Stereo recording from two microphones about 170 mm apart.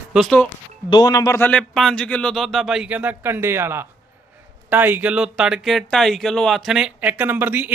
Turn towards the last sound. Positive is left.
turn(degrees=-10)  # may be behind; listen again after turning